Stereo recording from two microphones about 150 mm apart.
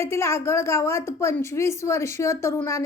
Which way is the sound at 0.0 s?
20° left (ahead or behind).